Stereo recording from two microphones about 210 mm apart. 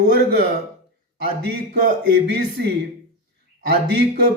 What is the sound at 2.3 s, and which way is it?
Speech, 50° right (ahead or behind).